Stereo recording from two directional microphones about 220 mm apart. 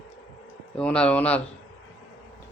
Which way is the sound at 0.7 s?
5° left (ahead or behind).